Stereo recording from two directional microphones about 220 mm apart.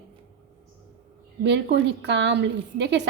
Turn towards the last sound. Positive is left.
turn(degrees=-50)  # may be behind; listen again after turning